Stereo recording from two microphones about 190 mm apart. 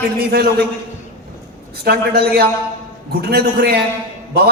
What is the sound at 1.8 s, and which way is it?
A man's voice, 55° right (ahead or behind).